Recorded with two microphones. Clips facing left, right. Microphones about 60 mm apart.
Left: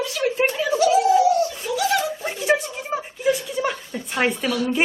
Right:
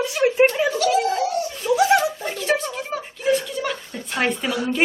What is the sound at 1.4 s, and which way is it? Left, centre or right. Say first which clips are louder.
Laughter: right 4 dB; right.